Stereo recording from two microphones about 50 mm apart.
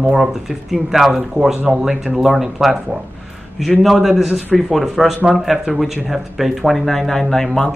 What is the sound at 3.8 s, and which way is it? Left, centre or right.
Speech, centre.